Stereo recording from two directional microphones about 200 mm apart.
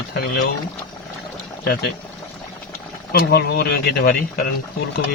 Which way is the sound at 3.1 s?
50° left (ahead or behind).